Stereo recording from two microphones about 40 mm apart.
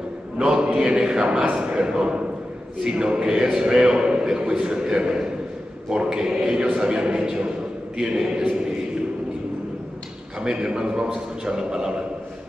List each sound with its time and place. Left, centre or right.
0.4 s a sound: centre
1.4 s a man's voice: right
10.4 s a man's voice: right